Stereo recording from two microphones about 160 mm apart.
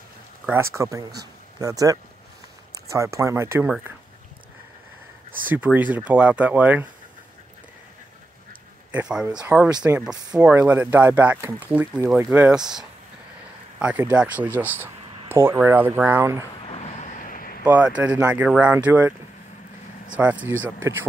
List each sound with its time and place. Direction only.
0.5 s speech: 15° right (ahead or behind)
5.5 s speech: 10° right (ahead or behind)
8.9 s speech: 5° right (ahead or behind)
16.5 s vehicle: 40° left (ahead or behind); by 17.6 s 60° left (ahead or behind)
17.7 s speech: 5° right (ahead or behind)